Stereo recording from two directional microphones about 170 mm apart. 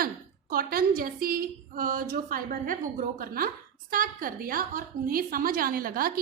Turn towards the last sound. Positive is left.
turn(degrees=-60)  # may be behind; listen again after turning